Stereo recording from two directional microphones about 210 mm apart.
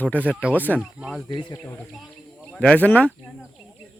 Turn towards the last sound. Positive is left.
turn(degrees=5)  # may be behind; listen again after turning